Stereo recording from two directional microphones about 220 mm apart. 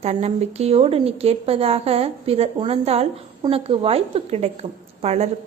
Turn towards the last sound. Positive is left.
turn(degrees=-30)  # may be behind; listen again after turning